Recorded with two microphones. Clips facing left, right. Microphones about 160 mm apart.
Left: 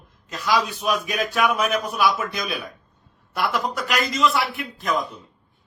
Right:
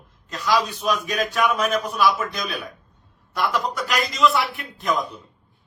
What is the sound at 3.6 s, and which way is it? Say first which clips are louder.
A man's voice: even; centre (ahead or behind).